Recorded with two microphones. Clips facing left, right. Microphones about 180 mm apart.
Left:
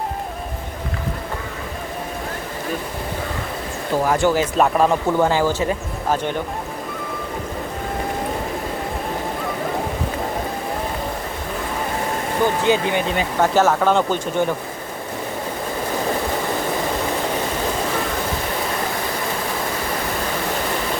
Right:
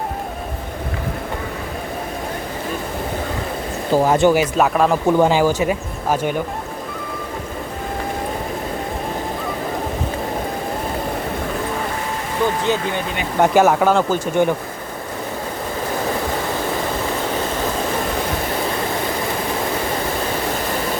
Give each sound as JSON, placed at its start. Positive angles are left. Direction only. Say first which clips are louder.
{"t": 3.9, "sound": "speech", "louder": "right 4 dB", "side_deg": -25}
{"t": 4.5, "sound": "speech", "louder": "even", "side_deg": 0}
{"t": 5.0, "sound": "speech", "louder": "right 3 dB", "side_deg": -15}
{"t": 13.4, "sound": "speech", "louder": "right 3 dB", "side_deg": -15}